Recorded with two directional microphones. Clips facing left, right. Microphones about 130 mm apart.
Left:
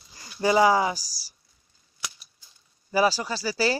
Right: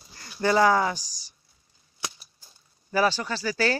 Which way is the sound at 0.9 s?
35° left (ahead or behind).